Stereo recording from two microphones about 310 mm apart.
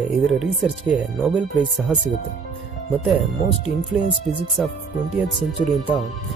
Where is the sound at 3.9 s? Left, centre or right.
Centre.